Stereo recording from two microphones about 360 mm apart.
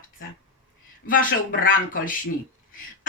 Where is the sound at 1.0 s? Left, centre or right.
Left.